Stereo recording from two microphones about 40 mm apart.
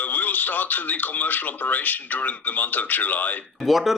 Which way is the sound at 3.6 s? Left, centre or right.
Centre.